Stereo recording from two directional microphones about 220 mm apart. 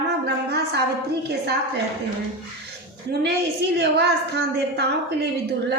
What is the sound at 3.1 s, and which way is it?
A woman's voice, 45° right (ahead or behind).